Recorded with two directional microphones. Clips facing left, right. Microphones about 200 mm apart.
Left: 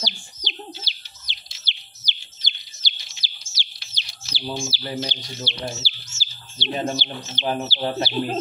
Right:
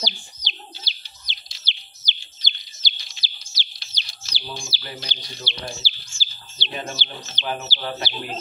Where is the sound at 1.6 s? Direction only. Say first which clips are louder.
Right 1 dB; 70° left (ahead or behind).